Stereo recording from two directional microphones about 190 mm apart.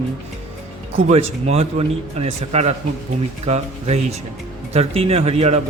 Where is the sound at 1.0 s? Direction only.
35° right (ahead or behind).